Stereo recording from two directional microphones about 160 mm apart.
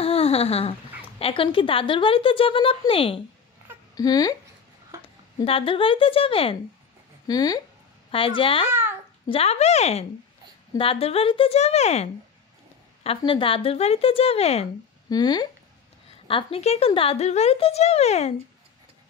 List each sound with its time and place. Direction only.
0.0 s a sound: 40° left (ahead or behind)
1.2 s speech: 35° left (ahead or behind)
3.9 s speech: 25° left (ahead or behind)
5.4 s speech: 35° left (ahead or behind)
7.2 s speech: 25° left (ahead or behind); by 14.7 s 40° left (ahead or behind)
15.0 s speech: 25° left (ahead or behind); by 18.3 s 40° left (ahead or behind)